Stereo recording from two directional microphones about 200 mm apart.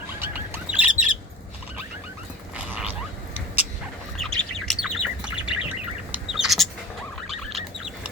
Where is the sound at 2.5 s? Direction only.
5° right (ahead or behind).